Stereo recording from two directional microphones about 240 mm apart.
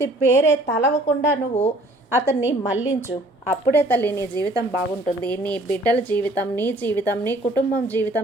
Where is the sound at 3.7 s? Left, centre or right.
Centre.